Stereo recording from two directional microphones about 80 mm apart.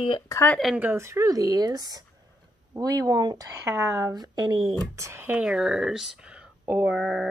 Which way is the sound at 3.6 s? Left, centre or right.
Right.